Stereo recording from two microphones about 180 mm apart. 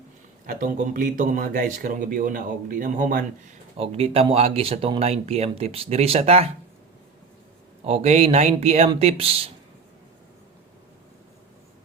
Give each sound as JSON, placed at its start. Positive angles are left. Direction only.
{"t": 0.4, "sound": "speech", "side_deg": -50}
{"t": 3.8, "sound": "speech", "side_deg": -35}
{"t": 7.9, "sound": "speech", "side_deg": -35}